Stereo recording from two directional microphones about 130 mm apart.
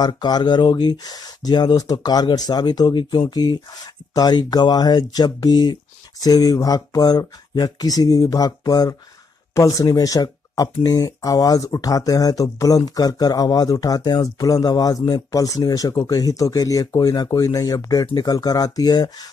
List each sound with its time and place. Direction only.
0.0 s speech: 35° left (ahead or behind)